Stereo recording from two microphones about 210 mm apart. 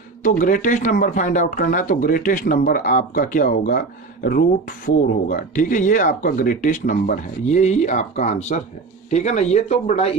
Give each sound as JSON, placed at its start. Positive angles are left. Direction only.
{"t": 0.2, "sound": "speech", "side_deg": 40}